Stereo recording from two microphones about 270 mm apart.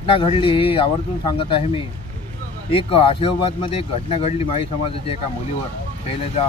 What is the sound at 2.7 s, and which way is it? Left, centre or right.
Speech, centre.